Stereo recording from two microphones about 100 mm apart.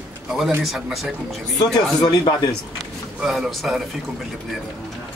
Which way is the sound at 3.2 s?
5° right (ahead or behind).